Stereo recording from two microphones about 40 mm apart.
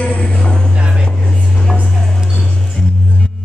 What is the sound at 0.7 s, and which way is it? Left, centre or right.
Music, right.